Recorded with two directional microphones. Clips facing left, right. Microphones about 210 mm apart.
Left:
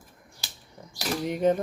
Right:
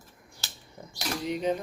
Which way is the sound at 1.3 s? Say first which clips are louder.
Left 5 dB; 50° left (ahead or behind).